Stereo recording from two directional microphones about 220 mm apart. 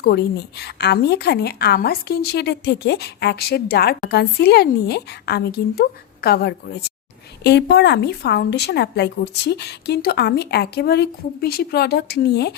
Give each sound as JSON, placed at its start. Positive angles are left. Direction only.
{"t": 0.0, "sound": "a woman's voice", "side_deg": 50}